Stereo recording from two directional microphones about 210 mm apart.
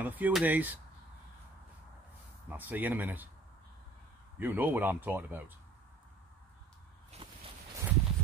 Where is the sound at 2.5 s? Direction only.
10° right (ahead or behind).